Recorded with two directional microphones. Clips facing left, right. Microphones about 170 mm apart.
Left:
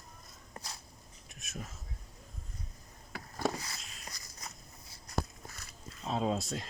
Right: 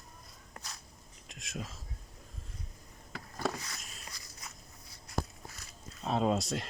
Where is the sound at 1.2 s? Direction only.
90° right.